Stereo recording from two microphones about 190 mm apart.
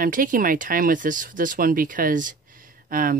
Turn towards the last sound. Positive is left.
turn(degrees=-45)  # may be behind; listen again after turning